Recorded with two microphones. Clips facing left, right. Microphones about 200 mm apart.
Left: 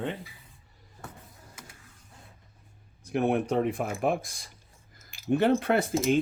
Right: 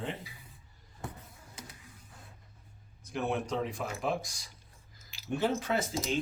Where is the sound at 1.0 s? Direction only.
20° right (ahead or behind).